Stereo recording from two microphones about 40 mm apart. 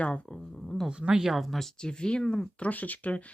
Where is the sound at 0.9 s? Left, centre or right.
Right.